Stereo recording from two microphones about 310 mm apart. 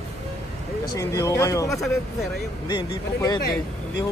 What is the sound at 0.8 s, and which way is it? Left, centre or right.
Speech, centre.